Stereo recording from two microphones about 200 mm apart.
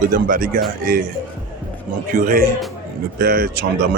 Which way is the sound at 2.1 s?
45° right (ahead or behind).